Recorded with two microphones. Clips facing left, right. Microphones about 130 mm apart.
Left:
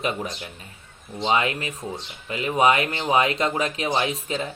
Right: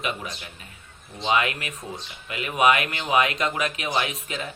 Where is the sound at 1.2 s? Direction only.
30° left (ahead or behind).